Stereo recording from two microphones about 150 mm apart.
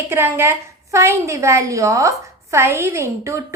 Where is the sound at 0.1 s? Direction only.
15° right (ahead or behind).